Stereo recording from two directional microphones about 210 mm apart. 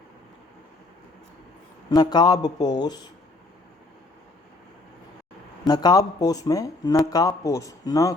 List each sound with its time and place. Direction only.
1.9 s speech: 20° left (ahead or behind)
5.6 s speech: 20° left (ahead or behind)